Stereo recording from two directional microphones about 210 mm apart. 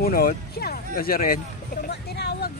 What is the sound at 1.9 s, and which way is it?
Vehicle, 50° left (ahead or behind).